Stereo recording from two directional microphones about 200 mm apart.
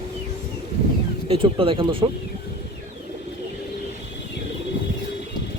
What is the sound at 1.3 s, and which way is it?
Speech, 25° right (ahead or behind).